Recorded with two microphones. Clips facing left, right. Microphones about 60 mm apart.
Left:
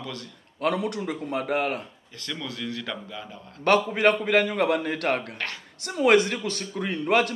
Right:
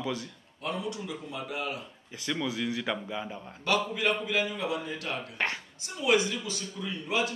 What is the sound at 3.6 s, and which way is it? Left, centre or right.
A man's voice, left.